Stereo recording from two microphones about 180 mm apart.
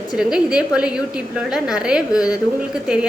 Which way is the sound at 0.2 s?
5° right (ahead or behind).